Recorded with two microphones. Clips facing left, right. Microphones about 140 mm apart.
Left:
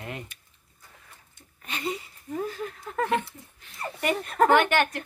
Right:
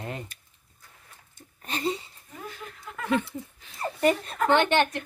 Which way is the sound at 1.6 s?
35° right (ahead or behind).